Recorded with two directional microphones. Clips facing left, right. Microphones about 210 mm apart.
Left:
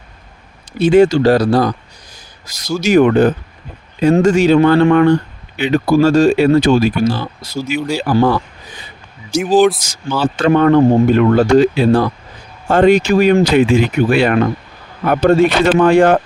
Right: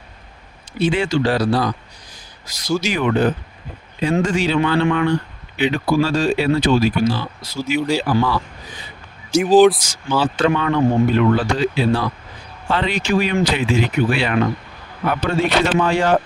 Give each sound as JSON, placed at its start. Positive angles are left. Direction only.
{"t": 0.8, "sound": "speech", "side_deg": 45}
{"t": 9.8, "sound": "speech", "side_deg": 45}